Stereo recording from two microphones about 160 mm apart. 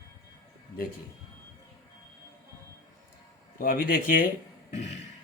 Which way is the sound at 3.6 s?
65° left (ahead or behind).